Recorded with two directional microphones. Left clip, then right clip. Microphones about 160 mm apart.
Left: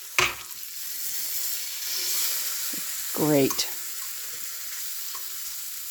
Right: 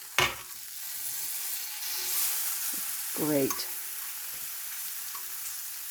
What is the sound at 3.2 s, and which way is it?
Speech, 55° left (ahead or behind).